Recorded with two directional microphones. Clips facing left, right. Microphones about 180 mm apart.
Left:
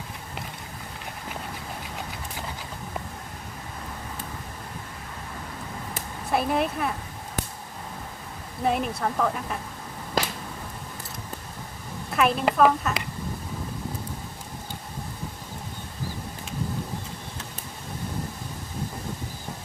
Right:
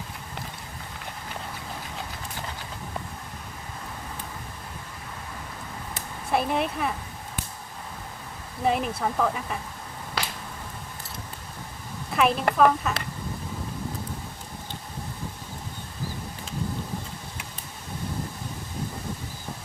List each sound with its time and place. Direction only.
6.3 s speech: centre (ahead or behind)
8.6 s speech: centre (ahead or behind)
12.1 s a woman's voice: centre (ahead or behind)